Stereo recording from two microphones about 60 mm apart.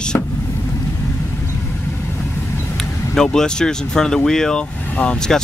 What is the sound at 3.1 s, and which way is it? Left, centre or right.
Speech, centre.